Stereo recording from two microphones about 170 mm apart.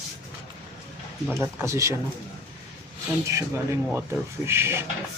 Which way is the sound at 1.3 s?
15° right (ahead or behind).